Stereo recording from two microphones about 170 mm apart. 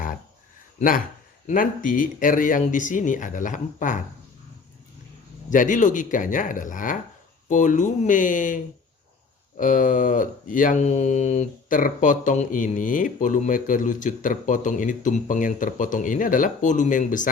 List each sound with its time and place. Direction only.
0.8 s speech: 55° left (ahead or behind)
5.5 s speech: 50° left (ahead or behind)